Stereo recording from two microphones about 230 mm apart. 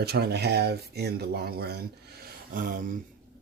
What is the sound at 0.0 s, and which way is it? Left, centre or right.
Speech, right.